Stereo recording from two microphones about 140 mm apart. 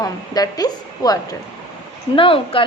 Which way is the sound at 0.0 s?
25° left (ahead or behind).